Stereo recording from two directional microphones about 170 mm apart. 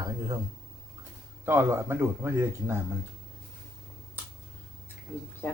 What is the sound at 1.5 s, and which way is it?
Speech, 15° right (ahead or behind).